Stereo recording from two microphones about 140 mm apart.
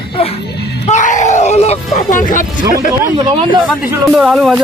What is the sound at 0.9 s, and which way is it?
Groan, 60° left (ahead or behind).